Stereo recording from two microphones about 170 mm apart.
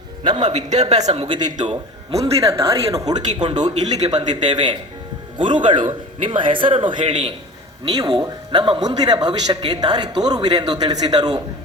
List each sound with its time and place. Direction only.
0.4 s speech: 45° right (ahead or behind)
2.9 s speech: 25° right (ahead or behind)